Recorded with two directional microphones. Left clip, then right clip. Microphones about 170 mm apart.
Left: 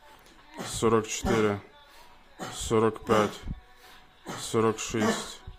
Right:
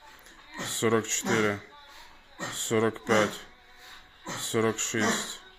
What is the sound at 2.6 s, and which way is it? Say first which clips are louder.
Speech: left 2 dB; 30° left (ahead or behind).